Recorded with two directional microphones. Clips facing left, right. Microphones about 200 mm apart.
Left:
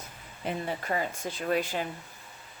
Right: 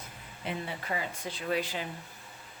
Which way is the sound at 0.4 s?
45° left (ahead or behind).